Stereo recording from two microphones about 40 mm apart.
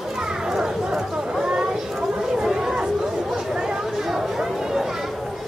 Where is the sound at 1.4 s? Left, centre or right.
Centre.